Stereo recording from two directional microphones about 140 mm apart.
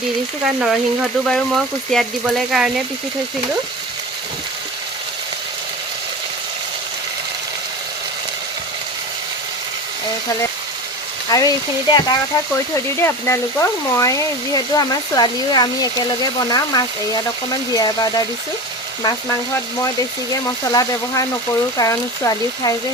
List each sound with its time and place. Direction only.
0.4 s speech: 5° right (ahead or behind)
11.3 s speech: 30° left (ahead or behind)
12.7 s speech: 20° left (ahead or behind)
20.3 s speech: 25° left (ahead or behind)